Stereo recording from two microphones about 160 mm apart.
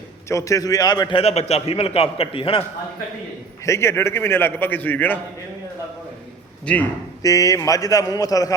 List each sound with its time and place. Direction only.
0.3 s a man's voice: 20° left (ahead or behind)
1.2 s a man's voice: 40° left (ahead or behind)
3.7 s a man's voice: 15° left (ahead or behind)
6.7 s a man's voice: 10° left (ahead or behind)
7.2 s a man's voice: 20° left (ahead or behind)